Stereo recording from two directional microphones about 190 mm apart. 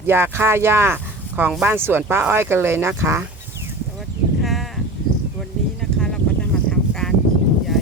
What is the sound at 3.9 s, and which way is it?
Sheep, centre (ahead or behind).